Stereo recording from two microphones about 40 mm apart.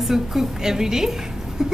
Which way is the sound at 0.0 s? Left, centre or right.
Centre.